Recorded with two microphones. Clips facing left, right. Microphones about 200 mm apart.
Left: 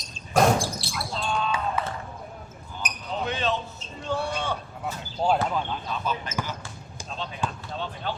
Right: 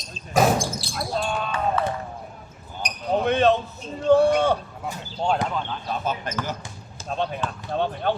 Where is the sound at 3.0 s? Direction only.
55° right (ahead or behind).